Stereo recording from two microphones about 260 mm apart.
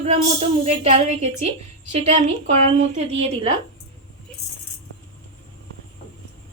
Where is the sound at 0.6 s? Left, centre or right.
Right.